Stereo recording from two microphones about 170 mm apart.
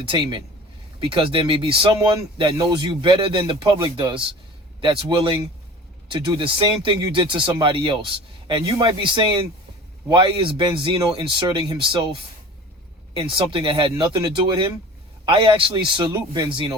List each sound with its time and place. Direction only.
0.1 s speech: 30° right (ahead or behind)
13.3 s speech: 30° right (ahead or behind)